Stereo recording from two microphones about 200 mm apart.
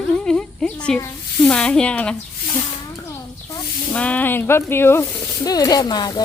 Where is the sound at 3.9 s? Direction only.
5° left (ahead or behind).